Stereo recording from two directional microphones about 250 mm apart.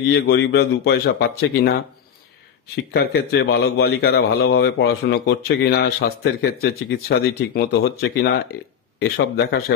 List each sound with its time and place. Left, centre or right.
0.1 s a man's voice: left
2.7 s a man's voice: left